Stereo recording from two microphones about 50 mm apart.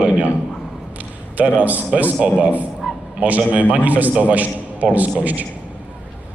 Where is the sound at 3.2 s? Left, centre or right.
Right.